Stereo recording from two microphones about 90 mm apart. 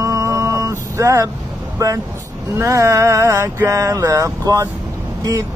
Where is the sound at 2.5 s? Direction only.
30° right (ahead or behind).